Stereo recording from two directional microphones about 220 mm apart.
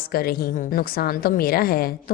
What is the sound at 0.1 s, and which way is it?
A woman's voice, 45° left (ahead or behind).